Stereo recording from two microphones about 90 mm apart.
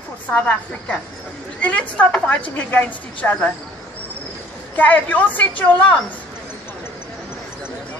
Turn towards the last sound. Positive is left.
turn(degrees=15)  # may be behind; listen again after turning